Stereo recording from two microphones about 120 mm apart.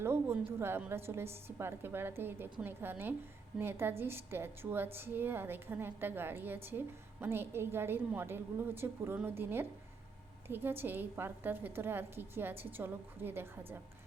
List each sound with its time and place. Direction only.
0.0 s a woman's voice: 20° right (ahead or behind)